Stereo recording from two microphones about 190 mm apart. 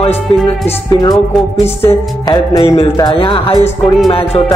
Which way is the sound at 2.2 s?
20° left (ahead or behind).